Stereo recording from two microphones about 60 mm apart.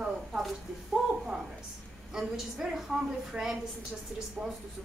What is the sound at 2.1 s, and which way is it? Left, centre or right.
A woman's voice, centre.